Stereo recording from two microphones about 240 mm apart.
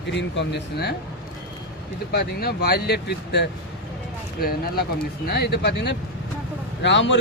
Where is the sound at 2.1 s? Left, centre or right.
Left.